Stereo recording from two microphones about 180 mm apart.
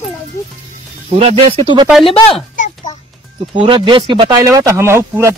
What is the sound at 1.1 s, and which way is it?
Speech, 35° right (ahead or behind).